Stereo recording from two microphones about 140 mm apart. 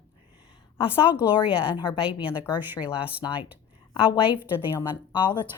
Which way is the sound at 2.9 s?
10° right (ahead or behind).